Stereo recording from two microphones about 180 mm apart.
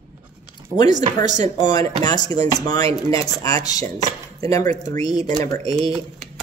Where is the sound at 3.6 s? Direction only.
20° left (ahead or behind).